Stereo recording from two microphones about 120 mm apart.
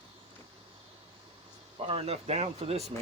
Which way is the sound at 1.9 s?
55° right (ahead or behind).